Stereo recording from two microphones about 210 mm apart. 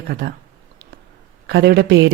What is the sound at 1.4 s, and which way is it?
Speech, 50° right (ahead or behind).